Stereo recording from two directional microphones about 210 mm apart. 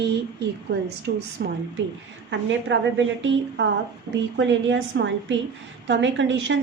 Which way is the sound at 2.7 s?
60° right (ahead or behind).